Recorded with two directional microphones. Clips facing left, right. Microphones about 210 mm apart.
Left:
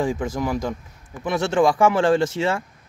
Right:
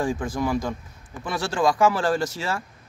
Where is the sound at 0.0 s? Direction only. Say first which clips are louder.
Left 2 dB; 20° left (ahead or behind).